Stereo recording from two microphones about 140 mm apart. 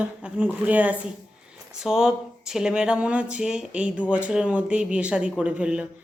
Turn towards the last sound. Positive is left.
turn(degrees=-5)  # may be behind; listen again after turning